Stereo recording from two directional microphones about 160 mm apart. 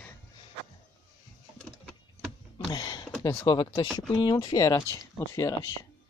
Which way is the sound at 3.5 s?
25° left (ahead or behind).